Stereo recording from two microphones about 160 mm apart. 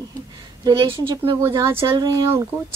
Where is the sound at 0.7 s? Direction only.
25° right (ahead or behind).